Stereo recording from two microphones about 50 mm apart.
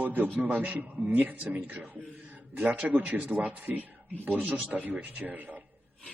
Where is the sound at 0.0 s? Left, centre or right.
Right.